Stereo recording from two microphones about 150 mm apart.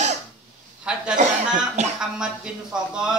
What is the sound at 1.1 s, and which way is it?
Speech, 55° right (ahead or behind).